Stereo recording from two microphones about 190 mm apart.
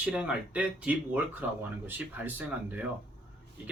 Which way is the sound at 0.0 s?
5° right (ahead or behind).